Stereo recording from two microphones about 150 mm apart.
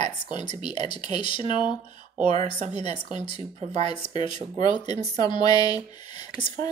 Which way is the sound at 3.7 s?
45° right (ahead or behind).